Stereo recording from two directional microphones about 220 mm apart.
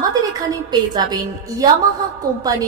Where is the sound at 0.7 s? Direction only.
20° right (ahead or behind).